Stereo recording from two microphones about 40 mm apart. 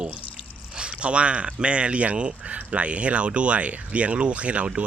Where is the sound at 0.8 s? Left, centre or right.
Right.